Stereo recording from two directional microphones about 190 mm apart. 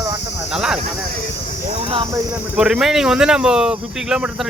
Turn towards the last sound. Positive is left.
turn(degrees=-5)  # may be behind; listen again after turning